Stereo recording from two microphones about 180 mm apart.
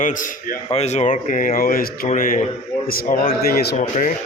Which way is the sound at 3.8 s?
45° left (ahead or behind).